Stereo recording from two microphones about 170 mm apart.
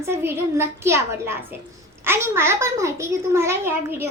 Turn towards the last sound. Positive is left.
turn(degrees=-15)  # may be behind; listen again after turning